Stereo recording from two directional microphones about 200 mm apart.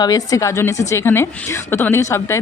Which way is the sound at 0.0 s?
20° left (ahead or behind).